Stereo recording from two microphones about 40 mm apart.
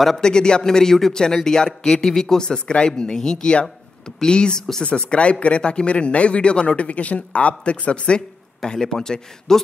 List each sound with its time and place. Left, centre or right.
0.2 s a man's voice: centre
8.6 s a man's voice: centre